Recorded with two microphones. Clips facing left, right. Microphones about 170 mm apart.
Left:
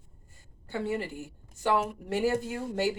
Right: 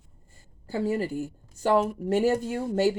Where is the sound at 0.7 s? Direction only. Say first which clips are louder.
Right 5 dB; 35° right (ahead or behind).